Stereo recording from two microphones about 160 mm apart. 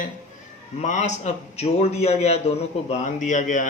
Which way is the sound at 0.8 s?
50° left (ahead or behind).